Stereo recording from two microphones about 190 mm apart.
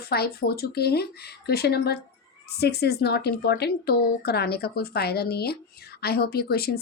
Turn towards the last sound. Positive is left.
turn(degrees=55)  # may be behind; listen again after turning